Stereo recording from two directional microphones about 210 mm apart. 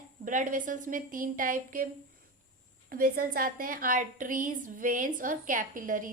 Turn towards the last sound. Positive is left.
turn(degrees=-40)  # may be behind; listen again after turning